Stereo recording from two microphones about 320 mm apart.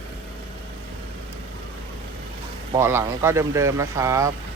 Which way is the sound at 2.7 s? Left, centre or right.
Centre.